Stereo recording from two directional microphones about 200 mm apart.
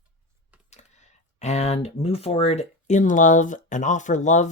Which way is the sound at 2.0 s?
30° left (ahead or behind).